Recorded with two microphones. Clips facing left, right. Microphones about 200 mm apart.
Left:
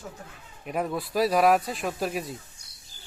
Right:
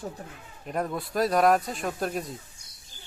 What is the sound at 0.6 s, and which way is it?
Speech, 5° left (ahead or behind).